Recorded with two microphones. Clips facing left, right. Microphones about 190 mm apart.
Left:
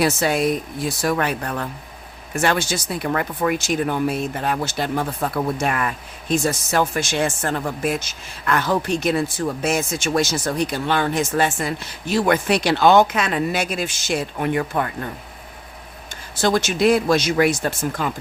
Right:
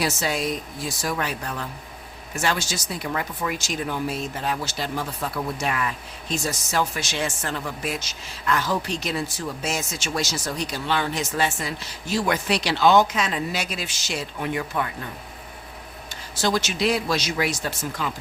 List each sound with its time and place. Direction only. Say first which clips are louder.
0.0 s speech: left 6 dB; 55° left (ahead or behind)
16.3 s speech: left 5 dB; 50° left (ahead or behind)